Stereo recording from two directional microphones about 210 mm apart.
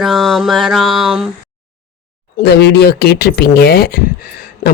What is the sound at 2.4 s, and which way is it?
Speech, 50° left (ahead or behind).